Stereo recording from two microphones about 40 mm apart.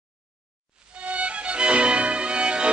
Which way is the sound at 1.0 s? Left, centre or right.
Right.